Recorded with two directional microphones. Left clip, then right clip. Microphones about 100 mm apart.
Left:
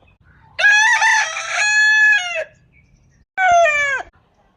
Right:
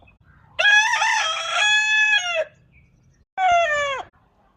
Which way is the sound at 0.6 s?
15° left (ahead or behind).